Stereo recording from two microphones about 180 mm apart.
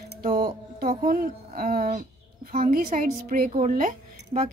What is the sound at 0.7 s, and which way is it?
A child's voice, 55° right (ahead or behind).